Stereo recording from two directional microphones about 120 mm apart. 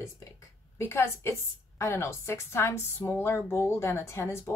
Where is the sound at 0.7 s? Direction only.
20° left (ahead or behind).